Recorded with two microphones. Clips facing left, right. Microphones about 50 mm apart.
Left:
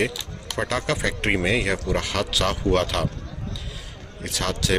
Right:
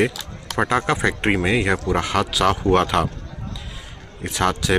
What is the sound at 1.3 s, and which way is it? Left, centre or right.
A man's voice, centre.